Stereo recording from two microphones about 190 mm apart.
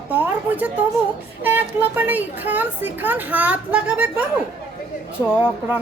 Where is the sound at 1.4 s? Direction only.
10° right (ahead or behind).